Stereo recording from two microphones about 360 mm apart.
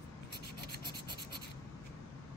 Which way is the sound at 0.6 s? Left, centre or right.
Left.